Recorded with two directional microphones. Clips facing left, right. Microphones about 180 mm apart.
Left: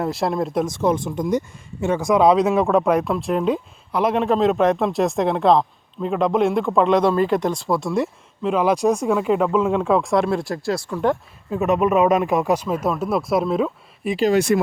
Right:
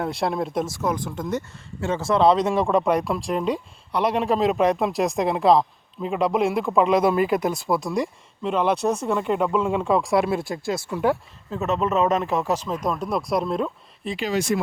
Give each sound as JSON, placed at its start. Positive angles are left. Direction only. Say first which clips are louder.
{"t": 0.0, "sound": "speech", "louder": "left 3 dB", "side_deg": 0}
{"t": 0.8, "sound": "speech", "louder": "left 5 dB", "side_deg": 25}
{"t": 11.5, "sound": "speech", "louder": "left 5 dB", "side_deg": 15}
{"t": 14.3, "sound": "speech", "louder": "left 3 dB", "side_deg": 60}